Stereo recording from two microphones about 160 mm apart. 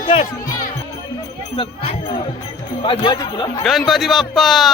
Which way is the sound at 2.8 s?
30° left (ahead or behind).